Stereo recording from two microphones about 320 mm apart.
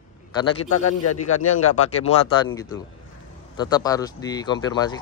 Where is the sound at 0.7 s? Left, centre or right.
Left.